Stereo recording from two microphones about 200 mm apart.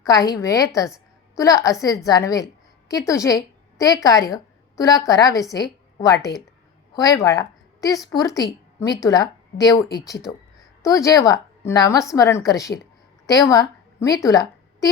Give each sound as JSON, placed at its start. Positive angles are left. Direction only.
{"t": 0.0, "sound": "a woman's voice", "side_deg": 15}